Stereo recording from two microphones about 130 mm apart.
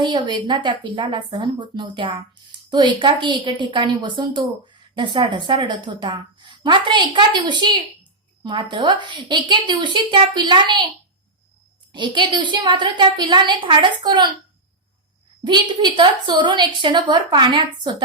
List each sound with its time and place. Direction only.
0.0 s a woman's voice: 35° right (ahead or behind)
11.9 s a woman's voice: 35° right (ahead or behind)
15.4 s a woman's voice: 35° right (ahead or behind)